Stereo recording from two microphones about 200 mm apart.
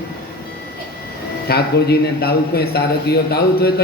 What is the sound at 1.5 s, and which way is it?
A man's voice, 50° left (ahead or behind).